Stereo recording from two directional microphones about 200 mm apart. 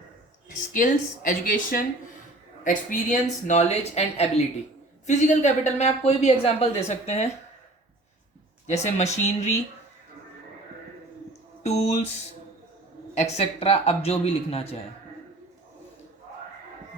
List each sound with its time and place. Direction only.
0.4 s speech: 40° left (ahead or behind)
8.7 s speech: 35° left (ahead or behind)
11.6 s speech: 35° left (ahead or behind)
13.2 s speech: 30° left (ahead or behind)